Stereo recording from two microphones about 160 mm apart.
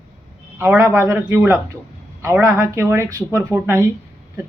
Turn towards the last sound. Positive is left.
turn(degrees=-15)  # may be behind; listen again after turning